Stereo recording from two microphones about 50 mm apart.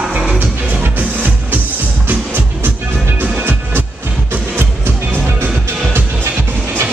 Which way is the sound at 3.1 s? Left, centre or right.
Right.